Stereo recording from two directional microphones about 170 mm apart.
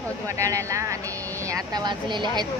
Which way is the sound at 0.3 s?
20° right (ahead or behind).